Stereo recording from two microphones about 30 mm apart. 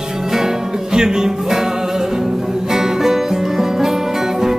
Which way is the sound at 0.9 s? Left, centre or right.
Right.